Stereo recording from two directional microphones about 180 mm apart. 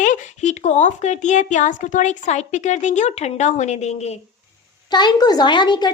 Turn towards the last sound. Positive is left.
turn(degrees=25)  # may be behind; listen again after turning